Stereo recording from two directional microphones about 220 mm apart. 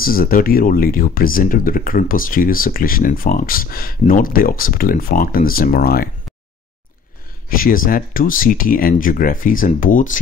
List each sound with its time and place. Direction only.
0.0 s speech: 40° left (ahead or behind)
7.4 s speech: 40° left (ahead or behind)